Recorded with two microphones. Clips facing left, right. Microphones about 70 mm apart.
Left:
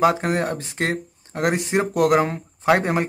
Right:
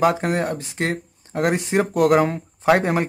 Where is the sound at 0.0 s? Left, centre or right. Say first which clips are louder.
Even; centre.